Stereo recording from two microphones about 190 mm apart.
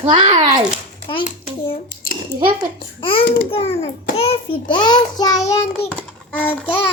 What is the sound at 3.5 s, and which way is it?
A child's voice, 30° left (ahead or behind).